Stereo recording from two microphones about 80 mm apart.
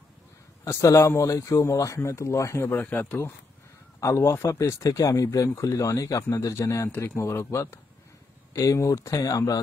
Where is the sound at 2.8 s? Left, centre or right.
Left.